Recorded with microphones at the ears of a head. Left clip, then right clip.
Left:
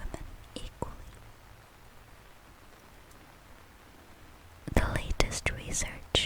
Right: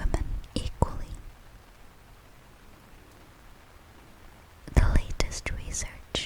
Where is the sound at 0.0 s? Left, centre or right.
Right.